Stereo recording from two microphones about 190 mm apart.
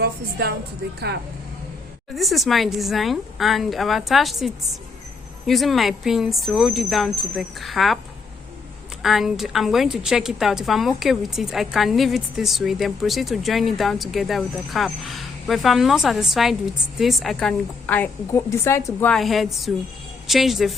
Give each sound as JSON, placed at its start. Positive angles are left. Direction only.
{"t": 0.0, "sound": "speech", "side_deg": -55}
{"t": 2.1, "sound": "a woman's voice", "side_deg": 0}
{"t": 9.0, "sound": "a woman's voice", "side_deg": 0}